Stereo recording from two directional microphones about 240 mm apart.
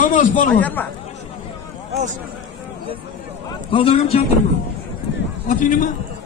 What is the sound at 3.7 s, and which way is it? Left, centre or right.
Speech, left.